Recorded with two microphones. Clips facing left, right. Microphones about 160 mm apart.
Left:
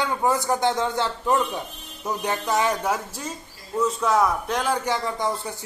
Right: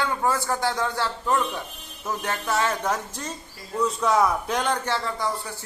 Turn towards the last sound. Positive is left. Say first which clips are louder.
# left 2 dB
turn(degrees=20)  # may be behind; listen again after turning